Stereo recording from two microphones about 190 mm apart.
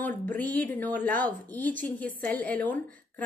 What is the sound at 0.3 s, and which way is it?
A woman's voice, 10° left (ahead or behind).